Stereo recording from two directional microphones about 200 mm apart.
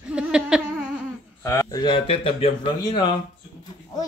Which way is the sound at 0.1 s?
5° right (ahead or behind).